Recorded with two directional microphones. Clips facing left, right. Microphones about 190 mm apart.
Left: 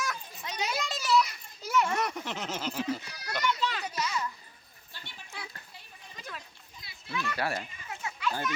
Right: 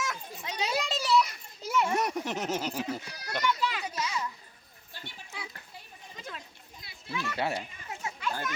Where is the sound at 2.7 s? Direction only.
15° right (ahead or behind).